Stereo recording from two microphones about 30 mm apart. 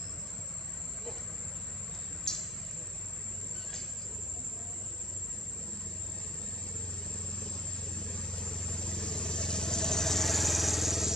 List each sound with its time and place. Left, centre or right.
2.3 s vehicle: centre
7.1 s vehicle: left; by 11.1 s centre